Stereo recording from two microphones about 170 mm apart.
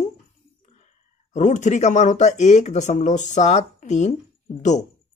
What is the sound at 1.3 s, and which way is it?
Speech, 45° left (ahead or behind).